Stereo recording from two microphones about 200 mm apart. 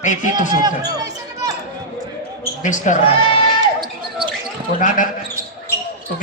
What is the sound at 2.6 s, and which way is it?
Speech, 40° left (ahead or behind).